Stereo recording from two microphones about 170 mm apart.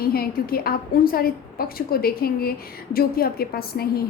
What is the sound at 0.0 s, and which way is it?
A woman's voice, 60° left (ahead or behind).